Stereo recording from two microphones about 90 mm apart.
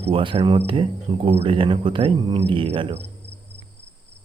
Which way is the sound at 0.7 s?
75° right (ahead or behind).